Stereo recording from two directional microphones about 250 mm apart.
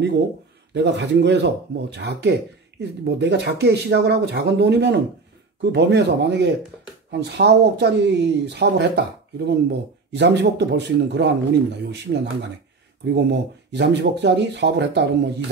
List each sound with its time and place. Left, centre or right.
0.8 s speech: right